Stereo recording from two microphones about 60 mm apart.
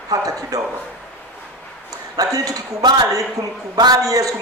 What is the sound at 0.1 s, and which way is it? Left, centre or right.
Speech, right.